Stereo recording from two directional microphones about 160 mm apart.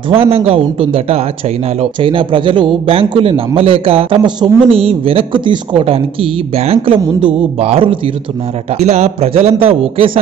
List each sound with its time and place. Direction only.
0.1 s a man's voice: 35° right (ahead or behind)